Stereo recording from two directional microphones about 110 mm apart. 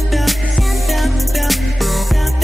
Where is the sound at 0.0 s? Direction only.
Centre (ahead or behind).